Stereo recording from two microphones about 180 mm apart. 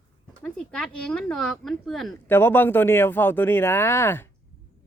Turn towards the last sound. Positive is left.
turn(degrees=10)  # may be behind; listen again after turning